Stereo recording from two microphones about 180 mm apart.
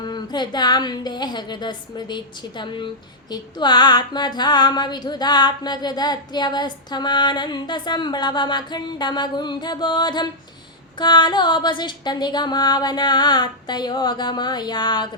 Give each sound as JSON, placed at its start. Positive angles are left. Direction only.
{"t": 0.0, "sound": "a woman's voice", "side_deg": 25}